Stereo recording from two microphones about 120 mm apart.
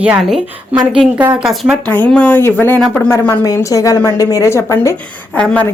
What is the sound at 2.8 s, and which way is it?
Speech, 5° left (ahead or behind).